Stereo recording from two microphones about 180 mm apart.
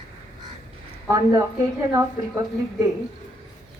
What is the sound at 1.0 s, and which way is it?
Speech, 15° right (ahead or behind).